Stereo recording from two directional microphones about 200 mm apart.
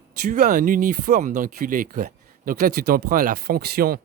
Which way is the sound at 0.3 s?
40° right (ahead or behind).